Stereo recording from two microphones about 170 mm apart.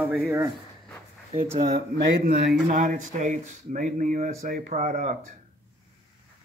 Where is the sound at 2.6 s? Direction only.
55° right (ahead or behind).